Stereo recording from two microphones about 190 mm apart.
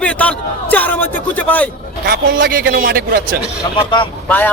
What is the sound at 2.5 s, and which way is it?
Speech, 50° right (ahead or behind).